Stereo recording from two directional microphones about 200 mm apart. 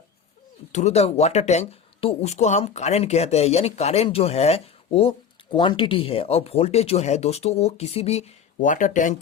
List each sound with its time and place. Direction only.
0.7 s speech: 35° left (ahead or behind)